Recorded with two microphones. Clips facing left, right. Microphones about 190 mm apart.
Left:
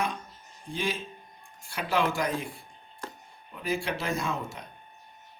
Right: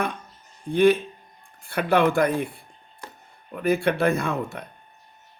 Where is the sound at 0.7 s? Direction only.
60° right (ahead or behind).